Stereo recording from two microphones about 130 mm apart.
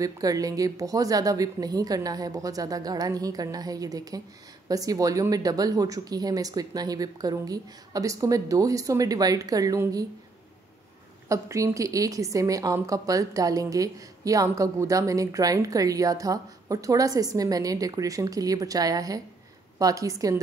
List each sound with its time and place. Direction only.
0.0 s a woman's voice: 25° right (ahead or behind)
11.2 s a woman's voice: 25° right (ahead or behind)